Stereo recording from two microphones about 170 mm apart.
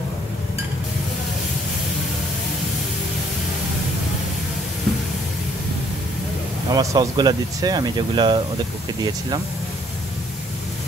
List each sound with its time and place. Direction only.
6.7 s speech: 20° right (ahead or behind)